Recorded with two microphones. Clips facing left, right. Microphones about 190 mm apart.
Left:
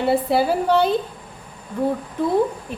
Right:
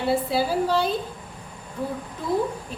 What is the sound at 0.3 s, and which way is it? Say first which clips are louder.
Speech: left 4 dB; 65° left (ahead or behind).